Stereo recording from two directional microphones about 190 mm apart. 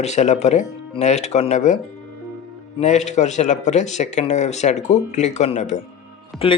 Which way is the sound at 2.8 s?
35° left (ahead or behind).